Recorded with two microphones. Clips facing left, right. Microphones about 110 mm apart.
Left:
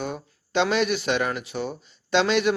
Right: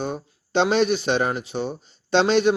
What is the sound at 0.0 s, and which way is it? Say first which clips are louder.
A man's voice: right 3 dB; 30° right (ahead or behind).